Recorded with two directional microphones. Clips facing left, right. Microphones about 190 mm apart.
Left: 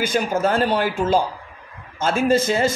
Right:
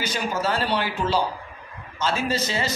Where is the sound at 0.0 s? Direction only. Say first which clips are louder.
Left 6 dB; 50° left (ahead or behind).